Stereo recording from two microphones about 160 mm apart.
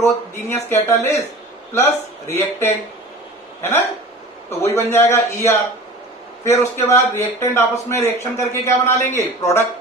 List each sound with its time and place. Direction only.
0.0 s a man's voice: 15° left (ahead or behind)
4.5 s a man's voice: 15° left (ahead or behind)